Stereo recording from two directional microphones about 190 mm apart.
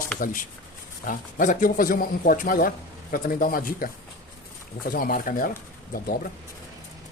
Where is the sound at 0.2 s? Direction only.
45° left (ahead or behind).